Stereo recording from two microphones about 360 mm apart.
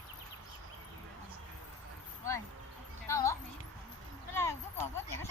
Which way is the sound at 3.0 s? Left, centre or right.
Centre.